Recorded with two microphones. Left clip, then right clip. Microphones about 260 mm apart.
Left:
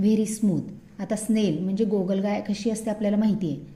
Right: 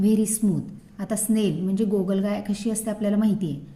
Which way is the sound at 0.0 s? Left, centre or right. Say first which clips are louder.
Right 1 dB; right.